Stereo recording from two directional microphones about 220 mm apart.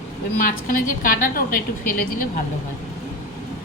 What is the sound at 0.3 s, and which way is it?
A woman's voice, 40° left (ahead or behind).